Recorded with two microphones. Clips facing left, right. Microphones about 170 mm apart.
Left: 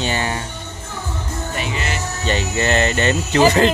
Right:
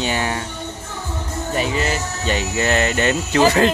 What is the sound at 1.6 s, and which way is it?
Music, 40° right (ahead or behind).